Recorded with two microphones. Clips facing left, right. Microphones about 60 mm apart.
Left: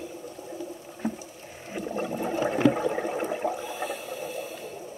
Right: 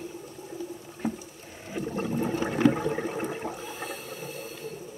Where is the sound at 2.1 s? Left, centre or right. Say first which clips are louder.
Right 1 dB; centre.